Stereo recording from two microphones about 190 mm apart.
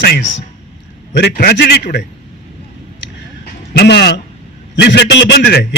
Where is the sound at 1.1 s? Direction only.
55° left (ahead or behind).